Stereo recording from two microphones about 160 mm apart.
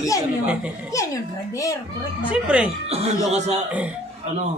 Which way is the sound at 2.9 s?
40° right (ahead or behind).